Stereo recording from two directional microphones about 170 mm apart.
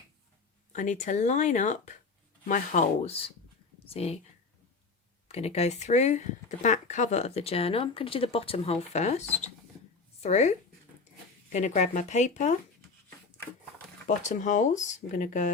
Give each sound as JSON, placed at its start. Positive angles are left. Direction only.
{"t": 0.7, "sound": "speech", "side_deg": 45}
{"t": 5.3, "sound": "a woman's voice", "side_deg": 40}
{"t": 14.2, "sound": "speech", "side_deg": 45}